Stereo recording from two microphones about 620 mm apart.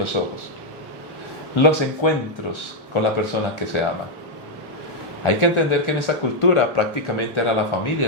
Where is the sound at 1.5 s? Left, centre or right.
Left.